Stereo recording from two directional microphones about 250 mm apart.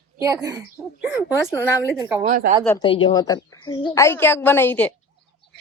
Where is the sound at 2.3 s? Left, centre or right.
Right.